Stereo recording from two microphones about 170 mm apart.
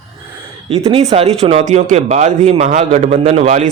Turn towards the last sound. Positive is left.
turn(degrees=-45)  # may be behind; listen again after turning